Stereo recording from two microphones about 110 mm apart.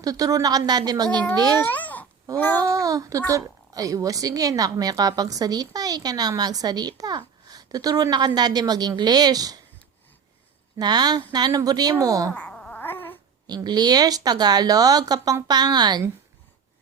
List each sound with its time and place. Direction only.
0.0 s a woman's voice: 35° right (ahead or behind)
1.1 s speech: 10° left (ahead or behind)
1.5 s babbling: 15° left (ahead or behind)
2.3 s speech: 15° left (ahead or behind)
2.6 s a woman's voice: 30° right (ahead or behind)
10.8 s a woman's voice: 40° right (ahead or behind)
12.3 s a sound: 10° left (ahead or behind)
12.8 s a sound: 20° left (ahead or behind)
13.5 s a woman's voice: 40° right (ahead or behind)